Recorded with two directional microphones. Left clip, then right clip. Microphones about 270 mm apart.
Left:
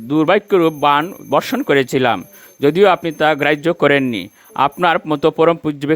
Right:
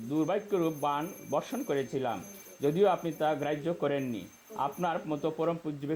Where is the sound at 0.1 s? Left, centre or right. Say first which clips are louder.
Left 17 dB; left.